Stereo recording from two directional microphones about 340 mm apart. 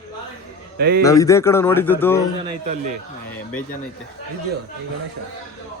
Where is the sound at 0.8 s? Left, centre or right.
Right.